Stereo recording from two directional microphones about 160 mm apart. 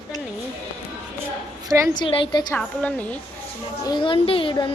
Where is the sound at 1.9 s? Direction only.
35° left (ahead or behind).